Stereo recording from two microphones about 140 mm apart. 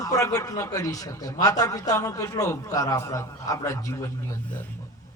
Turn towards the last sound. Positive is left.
turn(degrees=25)  # may be behind; listen again after turning